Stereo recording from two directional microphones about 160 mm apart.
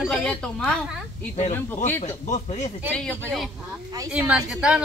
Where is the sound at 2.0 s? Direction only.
45° left (ahead or behind).